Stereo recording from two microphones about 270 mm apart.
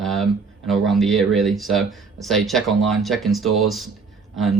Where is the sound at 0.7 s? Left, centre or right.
Centre.